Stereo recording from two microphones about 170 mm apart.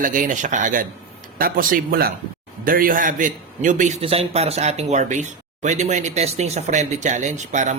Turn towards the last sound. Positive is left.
turn(degrees=-45)  # may be behind; listen again after turning